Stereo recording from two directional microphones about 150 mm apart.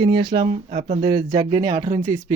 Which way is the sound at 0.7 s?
50° right (ahead or behind).